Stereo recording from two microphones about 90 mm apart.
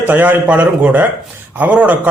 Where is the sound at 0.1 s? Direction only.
20° right (ahead or behind).